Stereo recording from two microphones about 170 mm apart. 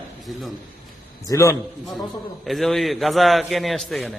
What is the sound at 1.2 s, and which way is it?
Speech, 20° left (ahead or behind).